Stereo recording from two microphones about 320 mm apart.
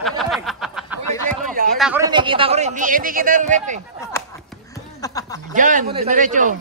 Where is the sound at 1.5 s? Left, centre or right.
Right.